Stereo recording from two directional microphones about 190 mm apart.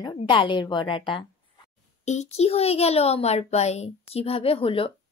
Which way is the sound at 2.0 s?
35° left (ahead or behind).